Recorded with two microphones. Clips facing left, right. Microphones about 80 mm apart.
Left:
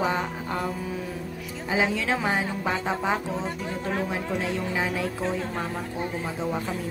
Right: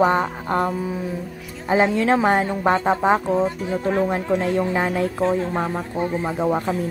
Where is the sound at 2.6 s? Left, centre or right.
Right.